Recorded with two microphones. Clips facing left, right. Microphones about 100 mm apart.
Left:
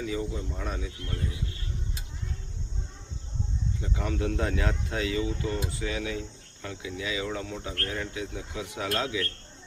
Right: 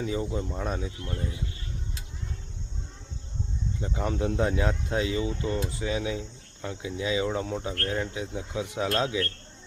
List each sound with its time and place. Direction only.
0.0 s speech: 35° right (ahead or behind)
3.8 s speech: 30° right (ahead or behind)